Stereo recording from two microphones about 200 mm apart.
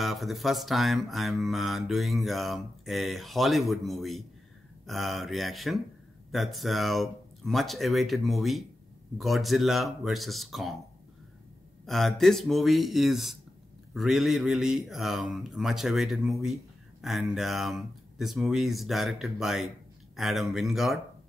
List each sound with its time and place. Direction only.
0.0 s mantra: centre (ahead or behind)
11.8 s mantra: centre (ahead or behind)